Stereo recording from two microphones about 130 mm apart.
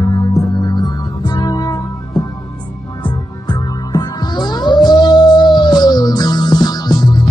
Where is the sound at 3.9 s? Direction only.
30° left (ahead or behind).